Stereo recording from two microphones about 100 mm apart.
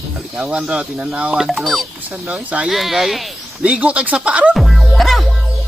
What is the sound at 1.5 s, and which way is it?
Speech, centre (ahead or behind).